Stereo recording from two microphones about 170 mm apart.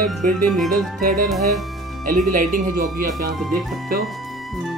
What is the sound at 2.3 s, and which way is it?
Speech, 50° right (ahead or behind).